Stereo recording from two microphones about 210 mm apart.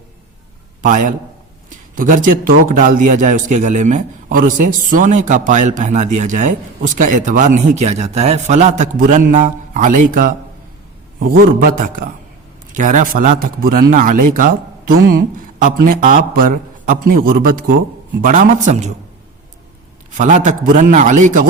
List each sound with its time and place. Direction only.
0.8 s a man's voice: 35° right (ahead or behind)
20.1 s a man's voice: 35° right (ahead or behind)